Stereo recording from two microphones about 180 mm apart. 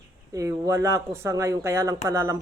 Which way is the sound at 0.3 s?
15° right (ahead or behind).